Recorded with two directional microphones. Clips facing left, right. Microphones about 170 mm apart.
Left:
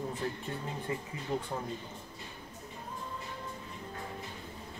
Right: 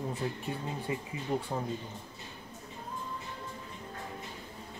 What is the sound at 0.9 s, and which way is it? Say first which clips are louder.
Speech: right 2 dB; 15° right (ahead or behind).